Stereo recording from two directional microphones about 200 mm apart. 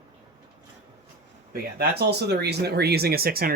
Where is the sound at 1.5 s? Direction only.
50° right (ahead or behind).